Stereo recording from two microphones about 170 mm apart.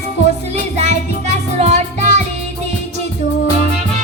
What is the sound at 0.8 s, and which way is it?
Music, 40° right (ahead or behind).